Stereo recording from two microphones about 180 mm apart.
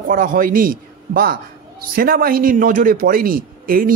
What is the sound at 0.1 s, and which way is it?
A man's voice, 50° right (ahead or behind).